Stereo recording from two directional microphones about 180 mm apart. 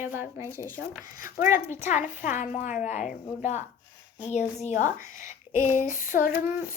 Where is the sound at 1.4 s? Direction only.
45° left (ahead or behind).